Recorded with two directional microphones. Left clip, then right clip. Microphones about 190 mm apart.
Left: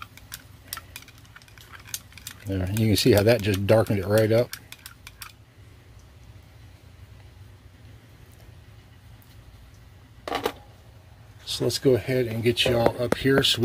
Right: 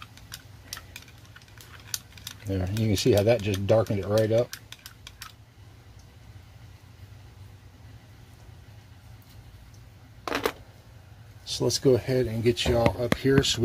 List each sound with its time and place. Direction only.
2.4 s speech: 5° left (ahead or behind)
2.8 s speech: 25° left (ahead or behind)
11.4 s speech: 5° left (ahead or behind)